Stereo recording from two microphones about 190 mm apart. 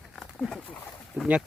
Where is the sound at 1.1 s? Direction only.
5° right (ahead or behind).